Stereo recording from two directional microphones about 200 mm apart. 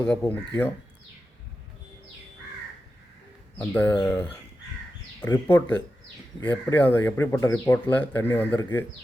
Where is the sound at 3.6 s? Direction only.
10° left (ahead or behind).